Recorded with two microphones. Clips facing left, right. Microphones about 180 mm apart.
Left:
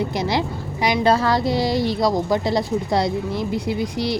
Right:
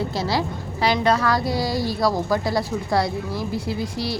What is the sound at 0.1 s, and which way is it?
Speech, 20° left (ahead or behind).